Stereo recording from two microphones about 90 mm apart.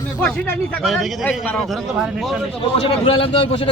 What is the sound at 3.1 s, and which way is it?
Speech, 90° left.